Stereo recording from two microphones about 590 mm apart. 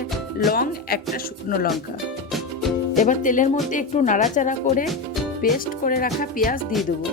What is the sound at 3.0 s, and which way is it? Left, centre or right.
Speech, centre.